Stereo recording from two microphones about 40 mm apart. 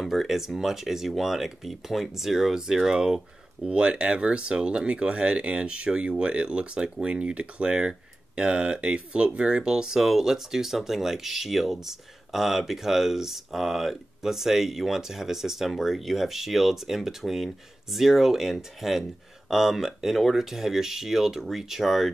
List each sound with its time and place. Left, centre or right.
0.0 s speech: centre